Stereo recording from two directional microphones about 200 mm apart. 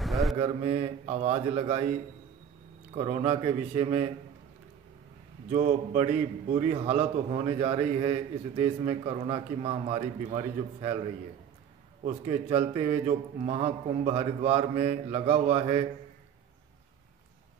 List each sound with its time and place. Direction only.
0.0 s mantra: centre (ahead or behind)
0.4 s a man's voice: 30° right (ahead or behind)
5.5 s a man's voice: 35° right (ahead or behind)
12.0 s a man's voice: 30° right (ahead or behind)